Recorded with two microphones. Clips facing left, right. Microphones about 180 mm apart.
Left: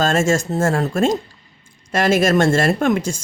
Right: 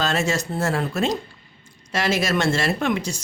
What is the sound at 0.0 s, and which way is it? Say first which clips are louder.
Speech: left 6 dB; 45° left (ahead or behind).